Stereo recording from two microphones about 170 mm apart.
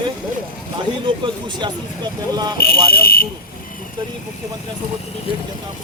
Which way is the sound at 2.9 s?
60° left (ahead or behind).